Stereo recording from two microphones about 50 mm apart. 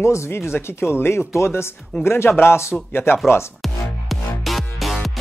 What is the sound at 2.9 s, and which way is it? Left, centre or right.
Speech, left.